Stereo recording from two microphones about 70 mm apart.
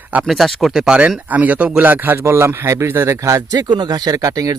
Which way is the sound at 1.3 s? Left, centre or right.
Right.